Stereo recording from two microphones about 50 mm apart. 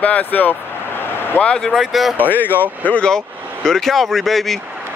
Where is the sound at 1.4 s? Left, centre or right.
Left.